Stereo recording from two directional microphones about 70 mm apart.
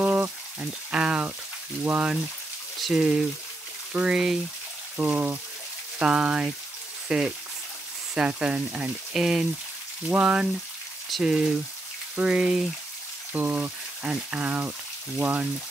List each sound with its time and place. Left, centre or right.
0.0 s a sound: right
1.9 s frying: centre
4.9 s speech: centre
5.9 s frying: centre
7.1 s speech: centre
8.1 s frying: centre
11.1 s speech: centre
12.2 s frying: centre
13.3 s speech: right